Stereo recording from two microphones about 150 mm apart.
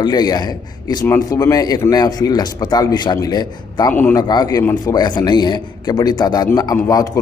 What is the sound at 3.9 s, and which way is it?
Speech, 10° left (ahead or behind).